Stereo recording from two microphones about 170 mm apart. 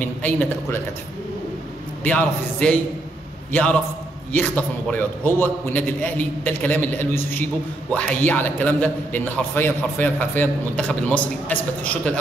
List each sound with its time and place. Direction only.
0.0 s speech: 10° left (ahead or behind)
2.0 s a man's voice: 10° left (ahead or behind)
4.3 s a man's voice: 10° left (ahead or behind)